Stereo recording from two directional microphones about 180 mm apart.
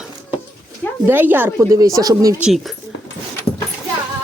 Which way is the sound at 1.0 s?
10° right (ahead or behind).